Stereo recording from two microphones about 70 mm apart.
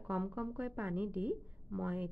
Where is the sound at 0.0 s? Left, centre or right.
Right.